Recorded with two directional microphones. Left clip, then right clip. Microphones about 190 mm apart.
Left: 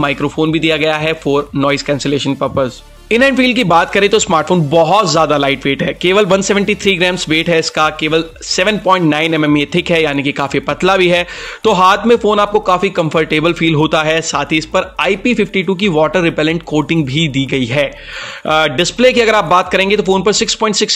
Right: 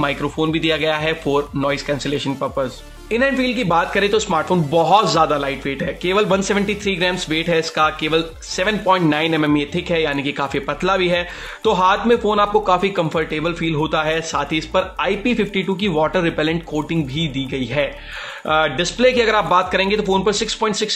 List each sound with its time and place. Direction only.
0.0 s speech: 30° left (ahead or behind)